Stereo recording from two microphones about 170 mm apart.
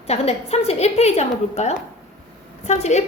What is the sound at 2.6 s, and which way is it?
Child singing, 45° left (ahead or behind).